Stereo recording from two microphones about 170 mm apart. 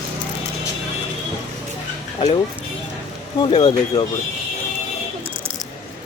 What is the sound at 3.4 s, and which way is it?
Speech, 30° left (ahead or behind).